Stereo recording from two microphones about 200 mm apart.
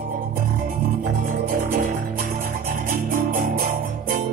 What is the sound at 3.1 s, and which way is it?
Music, 45° right (ahead or behind).